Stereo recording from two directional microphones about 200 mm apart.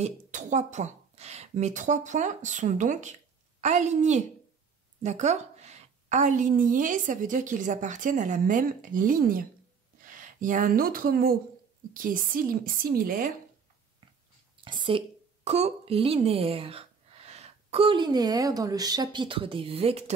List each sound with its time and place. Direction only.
0.0 s a woman's voice: 35° right (ahead or behind)
14.6 s a woman's voice: 25° right (ahead or behind)